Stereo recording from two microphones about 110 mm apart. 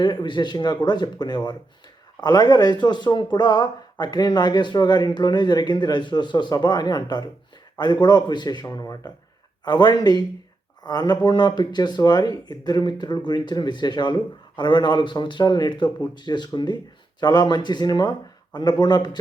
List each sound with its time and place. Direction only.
0.0 s speech: 45° left (ahead or behind)